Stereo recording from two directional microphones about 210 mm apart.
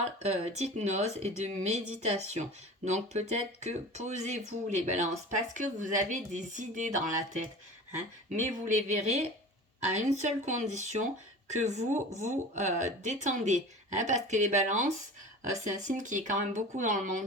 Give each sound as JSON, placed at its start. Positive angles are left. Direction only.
{"t": 0.2, "sound": "speech", "side_deg": -30}
{"t": 12.2, "sound": "speech", "side_deg": -35}